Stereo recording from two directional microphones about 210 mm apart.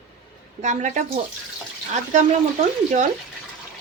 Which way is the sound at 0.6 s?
35° right (ahead or behind).